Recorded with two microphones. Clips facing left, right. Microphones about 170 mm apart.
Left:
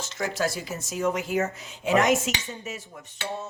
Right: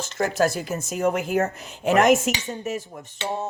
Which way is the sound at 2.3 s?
55° right (ahead or behind).